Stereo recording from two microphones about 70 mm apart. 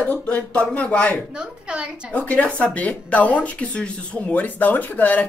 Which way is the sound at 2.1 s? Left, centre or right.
Centre.